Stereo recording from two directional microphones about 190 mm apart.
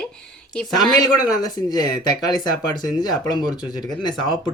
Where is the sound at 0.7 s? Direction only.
20° left (ahead or behind).